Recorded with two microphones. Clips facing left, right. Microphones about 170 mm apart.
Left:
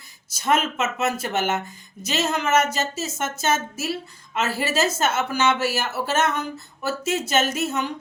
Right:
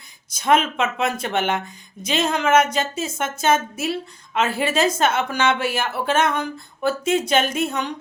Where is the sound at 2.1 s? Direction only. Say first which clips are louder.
Right 3 dB; 55° right (ahead or behind).